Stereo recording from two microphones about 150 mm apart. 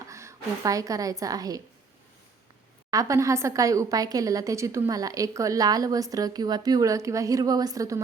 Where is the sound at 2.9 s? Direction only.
20° right (ahead or behind).